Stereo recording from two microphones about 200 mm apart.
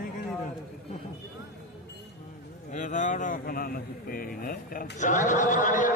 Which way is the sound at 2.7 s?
40° left (ahead or behind).